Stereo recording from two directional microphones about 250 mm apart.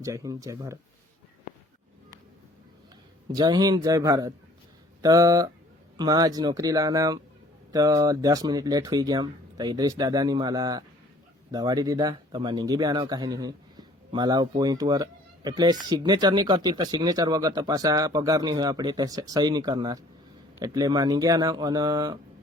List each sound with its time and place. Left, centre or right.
0.0 s speech: centre
3.3 s speech: centre